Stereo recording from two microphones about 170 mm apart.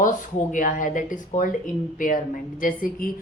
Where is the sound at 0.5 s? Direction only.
50° left (ahead or behind).